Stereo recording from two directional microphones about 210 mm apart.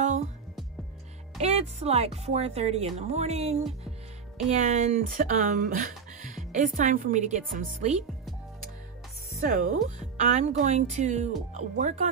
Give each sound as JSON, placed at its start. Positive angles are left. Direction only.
{"t": 1.4, "sound": "speech", "side_deg": -30}
{"t": 9.4, "sound": "speech", "side_deg": -40}